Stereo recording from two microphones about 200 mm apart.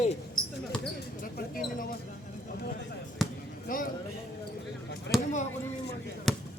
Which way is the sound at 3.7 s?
45° left (ahead or behind).